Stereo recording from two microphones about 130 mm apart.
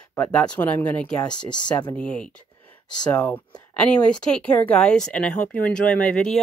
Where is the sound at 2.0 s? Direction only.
10° left (ahead or behind).